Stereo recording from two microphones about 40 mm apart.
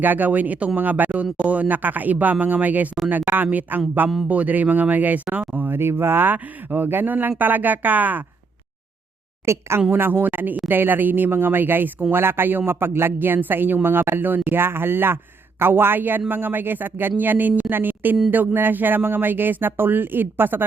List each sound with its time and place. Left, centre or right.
0.0 s speech: right
1.1 s speech: right
5.2 s speech: right
5.5 s speech: right
6.3 s speech: right
9.4 s a woman's voice: right
9.9 s speech: right
13.8 s speech: right
17.7 s speech: right